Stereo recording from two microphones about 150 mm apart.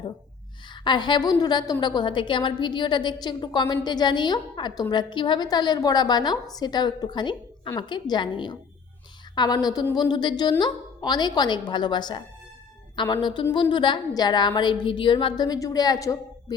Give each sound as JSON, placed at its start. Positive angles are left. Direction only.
{"t": 0.7, "sound": "a woman's voice", "side_deg": 30}
{"t": 13.2, "sound": "a woman's voice", "side_deg": 30}